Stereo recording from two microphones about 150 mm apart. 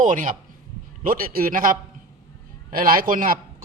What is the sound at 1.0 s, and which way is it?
A man's voice, 70° right (ahead or behind).